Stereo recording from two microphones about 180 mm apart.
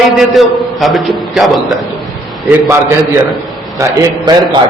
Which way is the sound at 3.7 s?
20° right (ahead or behind).